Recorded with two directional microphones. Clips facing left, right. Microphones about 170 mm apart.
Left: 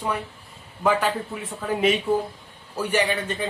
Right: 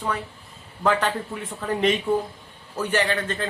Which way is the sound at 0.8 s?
10° left (ahead or behind).